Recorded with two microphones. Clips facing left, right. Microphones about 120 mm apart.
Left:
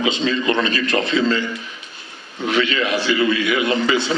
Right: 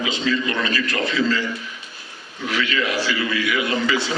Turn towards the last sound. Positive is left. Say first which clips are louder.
# left 3 dB
turn(degrees=25)  # may be behind; listen again after turning